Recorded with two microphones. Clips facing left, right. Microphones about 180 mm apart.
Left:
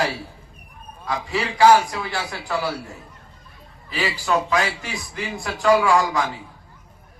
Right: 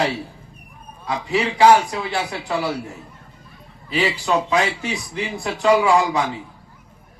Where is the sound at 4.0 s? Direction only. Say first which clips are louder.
Right 2 dB; 20° right (ahead or behind).